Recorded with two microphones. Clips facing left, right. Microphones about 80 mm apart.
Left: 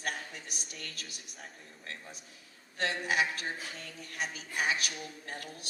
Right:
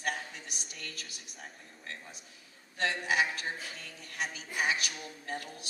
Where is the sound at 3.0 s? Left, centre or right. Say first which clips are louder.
Even; left.